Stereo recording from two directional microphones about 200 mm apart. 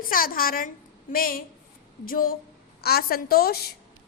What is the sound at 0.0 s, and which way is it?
A woman's voice, 45° left (ahead or behind).